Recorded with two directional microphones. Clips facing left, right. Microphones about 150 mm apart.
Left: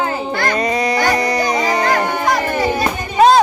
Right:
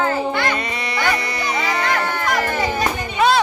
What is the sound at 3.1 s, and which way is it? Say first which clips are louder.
Music: left 6 dB; 40° left (ahead or behind).